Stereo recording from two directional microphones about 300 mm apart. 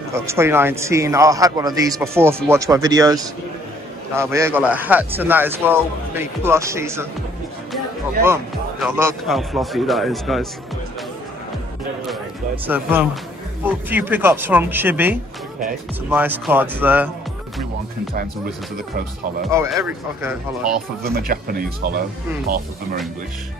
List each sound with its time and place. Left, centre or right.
0.1 s speech: centre
8.2 s speech: centre
12.6 s speech: centre
19.5 s speech: centre
21.0 s speech: right